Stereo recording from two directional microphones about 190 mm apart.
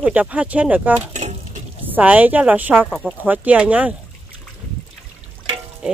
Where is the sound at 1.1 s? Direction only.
40° right (ahead or behind).